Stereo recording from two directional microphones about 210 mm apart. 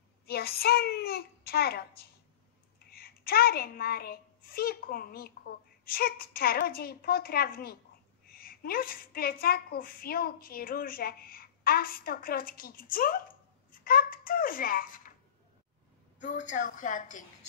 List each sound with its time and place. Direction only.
0.3 s a woman's voice: 45° left (ahead or behind)
16.2 s a woman's voice: 35° left (ahead or behind)